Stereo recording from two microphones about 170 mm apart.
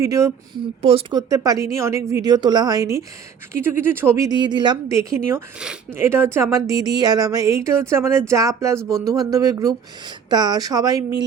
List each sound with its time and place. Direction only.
0.0 s a woman's voice: 20° right (ahead or behind)
0.8 s speech: 35° right (ahead or behind)
1.3 s a woman's voice: 20° right (ahead or behind)